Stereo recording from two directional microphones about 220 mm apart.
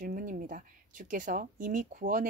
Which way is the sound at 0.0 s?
40° right (ahead or behind).